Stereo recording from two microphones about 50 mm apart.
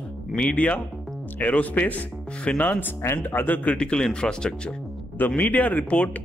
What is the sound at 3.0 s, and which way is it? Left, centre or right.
Speech, left.